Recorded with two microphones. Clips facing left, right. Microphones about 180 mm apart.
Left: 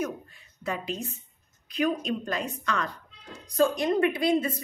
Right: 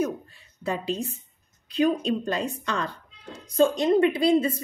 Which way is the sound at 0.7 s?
30° right (ahead or behind).